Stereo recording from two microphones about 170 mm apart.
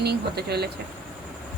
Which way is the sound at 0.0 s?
70° right (ahead or behind).